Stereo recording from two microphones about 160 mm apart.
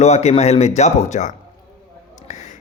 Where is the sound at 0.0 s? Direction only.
45° left (ahead or behind).